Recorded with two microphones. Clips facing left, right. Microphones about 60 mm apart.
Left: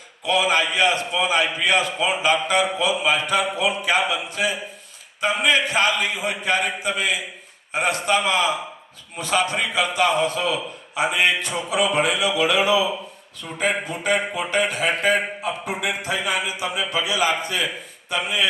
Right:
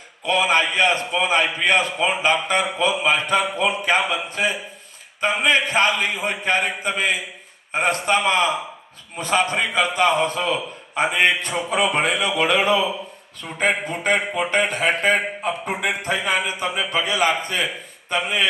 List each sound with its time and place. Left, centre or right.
0.3 s a man's voice: right